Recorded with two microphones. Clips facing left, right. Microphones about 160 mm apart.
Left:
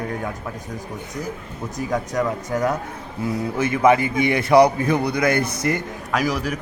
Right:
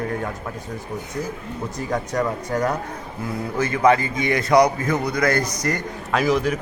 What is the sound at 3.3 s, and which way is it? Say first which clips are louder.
A man's voice: left 2 dB; 20° left (ahead or behind).